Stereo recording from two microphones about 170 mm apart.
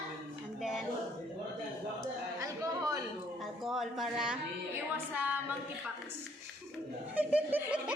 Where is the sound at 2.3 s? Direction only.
20° right (ahead or behind).